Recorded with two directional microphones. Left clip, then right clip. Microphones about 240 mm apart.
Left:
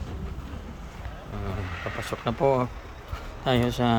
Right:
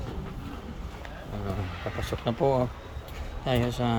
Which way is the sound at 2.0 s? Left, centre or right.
Centre.